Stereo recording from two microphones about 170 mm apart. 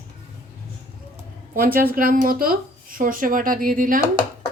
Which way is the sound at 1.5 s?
60° right (ahead or behind).